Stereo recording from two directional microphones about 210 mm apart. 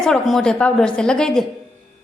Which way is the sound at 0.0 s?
Centre (ahead or behind).